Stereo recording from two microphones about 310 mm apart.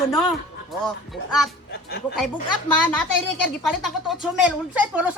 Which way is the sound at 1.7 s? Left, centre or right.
Left.